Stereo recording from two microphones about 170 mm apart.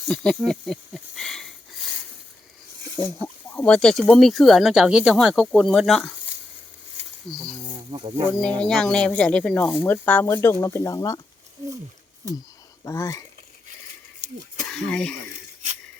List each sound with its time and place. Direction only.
0.1 s snake: 5° left (ahead or behind)
3.5 s speech: 5° left (ahead or behind)
7.3 s speech: 5° left (ahead or behind)
7.9 s speech: 30° right (ahead or behind)
8.3 s speech: 5° left (ahead or behind)
12.8 s speech: 20° left (ahead or behind)
14.7 s speech: 5° left (ahead or behind)